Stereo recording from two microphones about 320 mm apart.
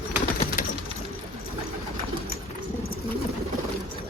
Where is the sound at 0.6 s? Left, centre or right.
Left.